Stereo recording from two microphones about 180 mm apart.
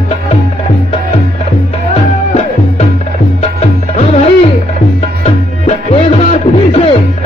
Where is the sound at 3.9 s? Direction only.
40° left (ahead or behind).